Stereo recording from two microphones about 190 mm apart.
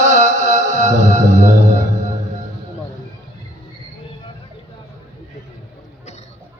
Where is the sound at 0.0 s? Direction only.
40° right (ahead or behind).